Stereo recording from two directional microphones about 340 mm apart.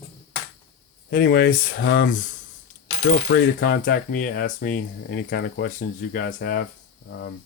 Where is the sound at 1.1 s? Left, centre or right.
Left.